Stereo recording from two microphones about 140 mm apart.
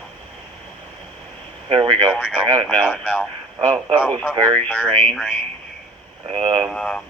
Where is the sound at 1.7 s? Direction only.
35° right (ahead or behind).